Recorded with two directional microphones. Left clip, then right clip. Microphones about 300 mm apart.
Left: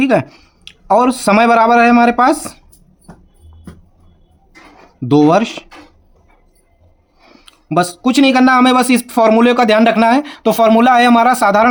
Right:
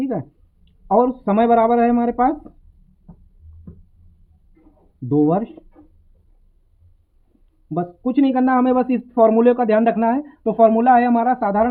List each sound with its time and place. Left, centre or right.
0.0 s speech: left
5.0 s speech: left
7.7 s speech: left